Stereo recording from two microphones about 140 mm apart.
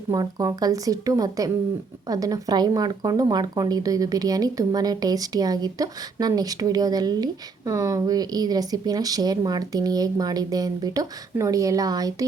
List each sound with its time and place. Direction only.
0.1 s speech: 25° right (ahead or behind)